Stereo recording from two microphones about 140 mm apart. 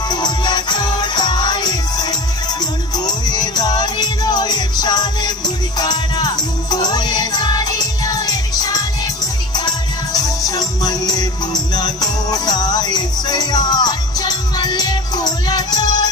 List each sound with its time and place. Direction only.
0.1 s music: 30° left (ahead or behind)
10.1 s music: 25° left (ahead or behind)